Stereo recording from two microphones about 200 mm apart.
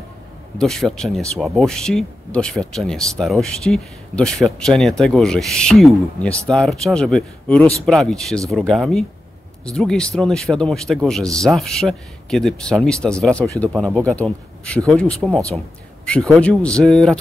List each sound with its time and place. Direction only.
0.6 s speech: centre (ahead or behind)